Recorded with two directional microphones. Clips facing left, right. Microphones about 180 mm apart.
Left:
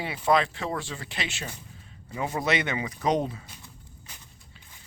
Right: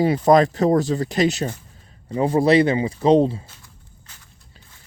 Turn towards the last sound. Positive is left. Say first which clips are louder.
# left 1 dB
turn(degrees=15)  # may be behind; listen again after turning